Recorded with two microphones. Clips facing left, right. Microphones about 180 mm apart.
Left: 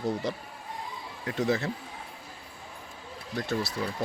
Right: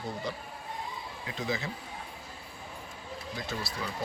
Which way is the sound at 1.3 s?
65° left (ahead or behind).